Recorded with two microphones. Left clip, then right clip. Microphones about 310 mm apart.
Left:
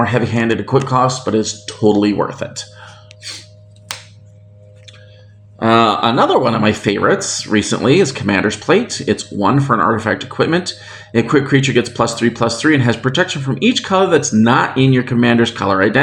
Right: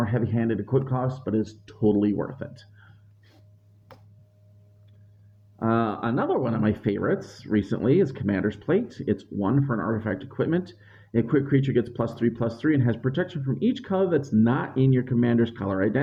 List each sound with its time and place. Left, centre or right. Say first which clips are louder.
0.0 s speech: left 12 dB; right
5.5 s speech: left 14 dB; right